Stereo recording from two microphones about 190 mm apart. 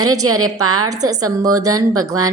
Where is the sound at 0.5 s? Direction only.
20° right (ahead or behind).